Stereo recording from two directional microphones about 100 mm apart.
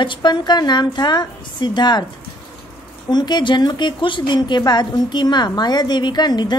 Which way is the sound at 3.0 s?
45° left (ahead or behind).